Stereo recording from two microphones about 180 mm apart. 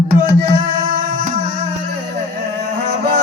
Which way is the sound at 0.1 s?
45° right (ahead or behind).